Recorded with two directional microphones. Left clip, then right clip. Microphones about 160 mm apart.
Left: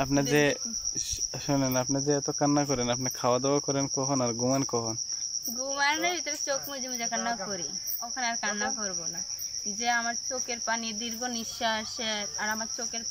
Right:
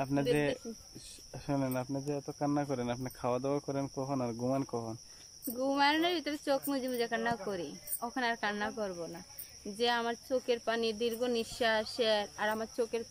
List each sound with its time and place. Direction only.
0.0 s cricket: 5° right (ahead or behind)
5.6 s speech: 30° right (ahead or behind)
9.8 s speech: 30° right (ahead or behind)